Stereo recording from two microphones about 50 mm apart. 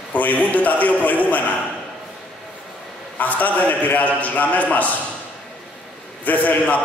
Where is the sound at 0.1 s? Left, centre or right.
Left.